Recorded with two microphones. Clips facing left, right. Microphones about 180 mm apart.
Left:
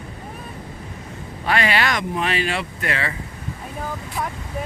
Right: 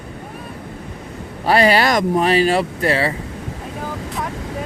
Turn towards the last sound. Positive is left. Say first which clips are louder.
# right 8 dB
turn(degrees=-35)  # may be behind; listen again after turning